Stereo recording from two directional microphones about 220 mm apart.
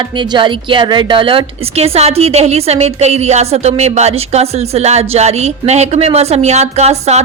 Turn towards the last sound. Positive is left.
turn(degrees=-30)  # may be behind; listen again after turning